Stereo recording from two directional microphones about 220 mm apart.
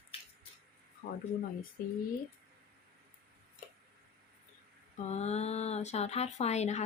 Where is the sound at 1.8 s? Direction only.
40° left (ahead or behind).